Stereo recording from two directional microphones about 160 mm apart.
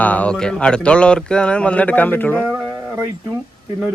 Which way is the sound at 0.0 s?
10° left (ahead or behind).